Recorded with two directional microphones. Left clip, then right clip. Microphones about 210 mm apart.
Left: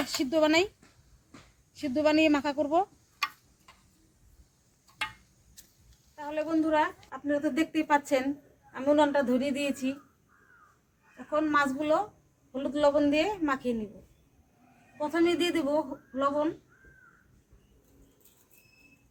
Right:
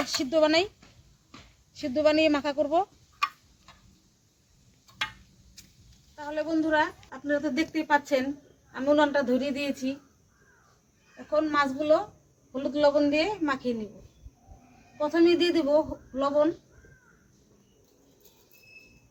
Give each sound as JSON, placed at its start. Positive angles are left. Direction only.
{"t": 0.0, "sound": "speech", "side_deg": 10}
{"t": 1.7, "sound": "a sound", "side_deg": 5}
{"t": 5.6, "sound": "a sound", "side_deg": 0}
{"t": 6.1, "sound": "a woman's voice", "side_deg": 10}
{"t": 11.3, "sound": "a woman's voice", "side_deg": 15}
{"t": 14.9, "sound": "a woman's voice", "side_deg": 15}